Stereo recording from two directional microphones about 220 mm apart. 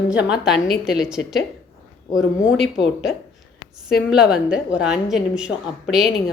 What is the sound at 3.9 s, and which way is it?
A woman's voice, centre (ahead or behind).